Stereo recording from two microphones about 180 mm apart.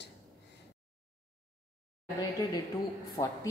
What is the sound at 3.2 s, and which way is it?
Speech, 25° left (ahead or behind).